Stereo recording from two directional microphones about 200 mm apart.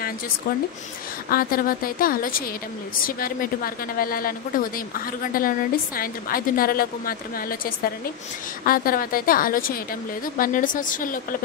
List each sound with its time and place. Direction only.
1.3 s a woman's voice: 45° left (ahead or behind)